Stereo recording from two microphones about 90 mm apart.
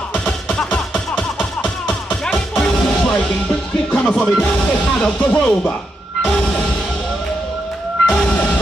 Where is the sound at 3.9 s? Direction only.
15° left (ahead or behind).